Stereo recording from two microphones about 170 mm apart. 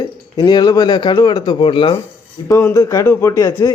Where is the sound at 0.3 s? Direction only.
25° left (ahead or behind).